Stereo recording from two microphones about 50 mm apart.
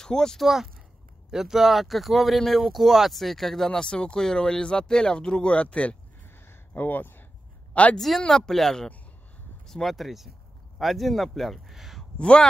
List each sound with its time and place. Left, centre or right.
0.0 s speech: centre
0.4 s speech: centre; by 5.9 s left
6.2 s a sound: left
6.8 s speech: left
7.7 s speech: left
8.3 s speech: centre
12.0 s a sound: centre